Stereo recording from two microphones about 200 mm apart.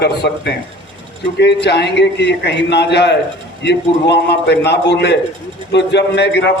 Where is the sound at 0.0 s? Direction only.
55° left (ahead or behind).